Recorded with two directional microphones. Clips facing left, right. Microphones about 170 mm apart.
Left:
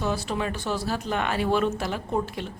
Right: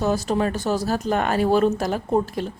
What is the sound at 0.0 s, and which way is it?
A woman's voice, 40° right (ahead or behind).